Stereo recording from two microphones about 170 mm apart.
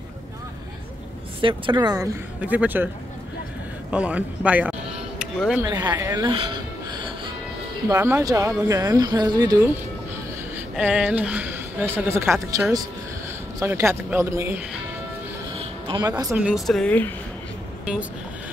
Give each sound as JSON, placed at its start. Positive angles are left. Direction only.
{"t": 1.4, "sound": "speech", "side_deg": -30}
{"t": 2.4, "sound": "a woman's voice", "side_deg": -10}
{"t": 3.9, "sound": "a woman's voice", "side_deg": -5}
{"t": 5.2, "sound": "music", "side_deg": -5}
{"t": 5.6, "sound": "speech", "side_deg": -25}
{"t": 6.2, "sound": "music", "side_deg": -30}
{"t": 7.9, "sound": "speech", "side_deg": -15}
{"t": 10.8, "sound": "a woman's voice", "side_deg": -10}
{"t": 15.6, "sound": "music", "side_deg": -25}
{"t": 16.3, "sound": "speech", "side_deg": -5}